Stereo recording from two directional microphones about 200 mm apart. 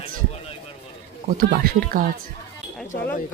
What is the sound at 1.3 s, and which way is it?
Speech, 45° right (ahead or behind).